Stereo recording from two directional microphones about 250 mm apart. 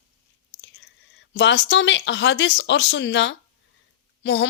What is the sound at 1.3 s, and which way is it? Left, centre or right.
Speech, left.